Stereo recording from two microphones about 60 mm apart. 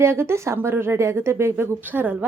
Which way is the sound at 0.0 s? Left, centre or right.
Right.